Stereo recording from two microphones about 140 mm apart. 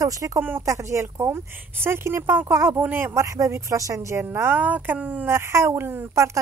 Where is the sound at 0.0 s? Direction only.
25° right (ahead or behind).